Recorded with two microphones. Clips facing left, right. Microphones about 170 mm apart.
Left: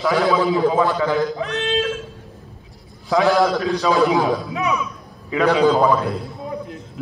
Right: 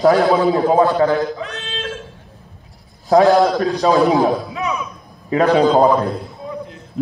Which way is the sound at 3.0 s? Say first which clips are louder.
Right 5 dB; 40° right (ahead or behind).